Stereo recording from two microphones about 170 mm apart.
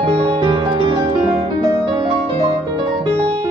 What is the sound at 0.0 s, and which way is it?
Music, 30° right (ahead or behind).